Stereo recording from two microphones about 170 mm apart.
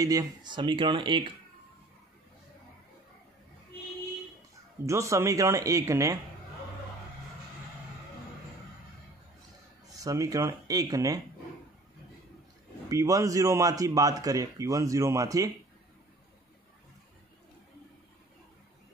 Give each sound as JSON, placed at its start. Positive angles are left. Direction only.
{"t": 0.0, "sound": "a man's voice", "side_deg": -20}
{"t": 4.8, "sound": "a man's voice", "side_deg": -15}
{"t": 9.9, "sound": "a man's voice", "side_deg": -20}
{"t": 12.9, "sound": "a man's voice", "side_deg": -20}